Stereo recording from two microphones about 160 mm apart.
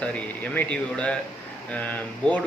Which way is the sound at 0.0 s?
10° left (ahead or behind).